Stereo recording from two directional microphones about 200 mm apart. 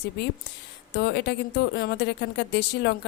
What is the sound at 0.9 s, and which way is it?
Speech, 55° left (ahead or behind).